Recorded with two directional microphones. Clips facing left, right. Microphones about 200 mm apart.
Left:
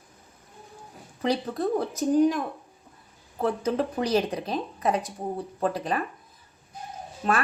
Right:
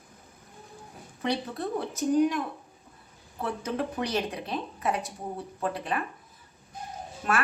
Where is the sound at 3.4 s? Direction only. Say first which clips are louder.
Left 5 dB; 35° left (ahead or behind).